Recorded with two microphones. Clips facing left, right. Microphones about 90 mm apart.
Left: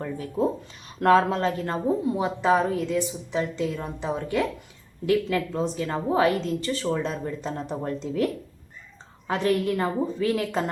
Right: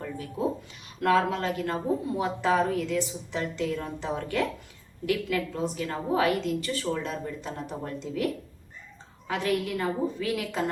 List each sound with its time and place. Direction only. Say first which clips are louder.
0.0 s a sound: left 6 dB; 35° left (ahead or behind)
0.9 s a woman's voice: left 4 dB; 35° left (ahead or behind); by 4.4 s 15° left (ahead or behind)
5.0 s a woman's voice: left 4 dB; 30° left (ahead or behind)